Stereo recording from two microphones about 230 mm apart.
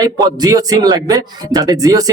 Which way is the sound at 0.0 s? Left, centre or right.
Centre.